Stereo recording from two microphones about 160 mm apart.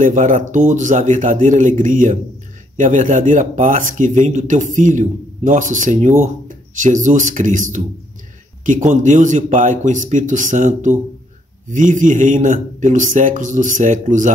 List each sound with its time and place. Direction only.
0.0 s speech: 50° right (ahead or behind)